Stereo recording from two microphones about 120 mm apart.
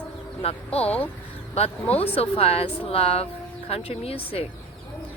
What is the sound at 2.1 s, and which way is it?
A woman's voice, 55° left (ahead or behind).